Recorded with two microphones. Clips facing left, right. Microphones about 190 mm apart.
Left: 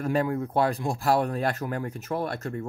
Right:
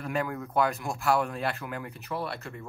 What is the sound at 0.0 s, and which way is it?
Speech, 35° left (ahead or behind).